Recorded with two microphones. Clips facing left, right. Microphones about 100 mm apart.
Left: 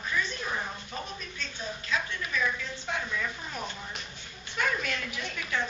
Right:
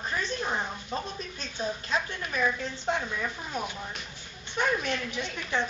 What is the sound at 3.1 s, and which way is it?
A woman's voice, 20° right (ahead or behind).